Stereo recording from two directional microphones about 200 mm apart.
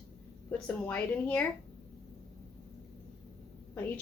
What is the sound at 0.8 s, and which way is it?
Speech, 10° left (ahead or behind).